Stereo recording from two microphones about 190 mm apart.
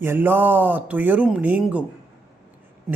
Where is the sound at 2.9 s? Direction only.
Centre (ahead or behind).